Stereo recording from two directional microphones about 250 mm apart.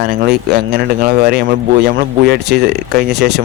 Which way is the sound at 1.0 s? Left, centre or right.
Right.